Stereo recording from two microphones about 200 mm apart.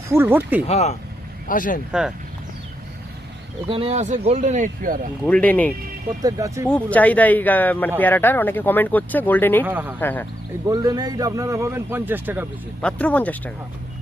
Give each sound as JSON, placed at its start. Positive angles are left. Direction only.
{"t": 0.1, "sound": "a man's voice", "side_deg": -10}
{"t": 0.7, "sound": "speech", "side_deg": 35}
{"t": 1.9, "sound": "speech", "side_deg": -5}
{"t": 3.7, "sound": "speech", "side_deg": -30}
{"t": 5.2, "sound": "speech", "side_deg": 5}
{"t": 6.2, "sound": "a man's voice", "side_deg": -15}
{"t": 6.7, "sound": "speech", "side_deg": 5}
{"t": 9.6, "sound": "a man's voice", "side_deg": -10}
{"t": 10.0, "sound": "speech", "side_deg": 10}
{"t": 10.7, "sound": "a man's voice", "side_deg": -20}
{"t": 12.8, "sound": "speech", "side_deg": 5}